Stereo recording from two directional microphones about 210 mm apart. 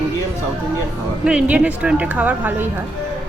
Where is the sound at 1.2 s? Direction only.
5° right (ahead or behind).